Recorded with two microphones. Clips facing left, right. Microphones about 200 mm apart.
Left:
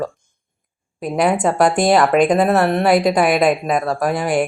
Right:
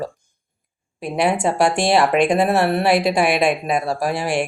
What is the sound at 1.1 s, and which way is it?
Speech, 25° right (ahead or behind).